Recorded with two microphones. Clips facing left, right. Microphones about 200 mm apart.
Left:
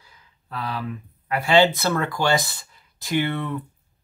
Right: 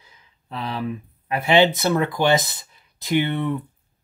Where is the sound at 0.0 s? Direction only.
20° right (ahead or behind).